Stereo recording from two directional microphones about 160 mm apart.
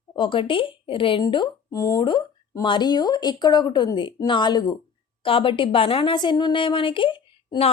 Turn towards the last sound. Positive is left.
turn(degrees=35)  # may be behind; listen again after turning